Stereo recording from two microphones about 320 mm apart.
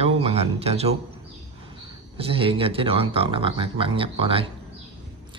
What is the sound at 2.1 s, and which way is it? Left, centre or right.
A man's voice, centre.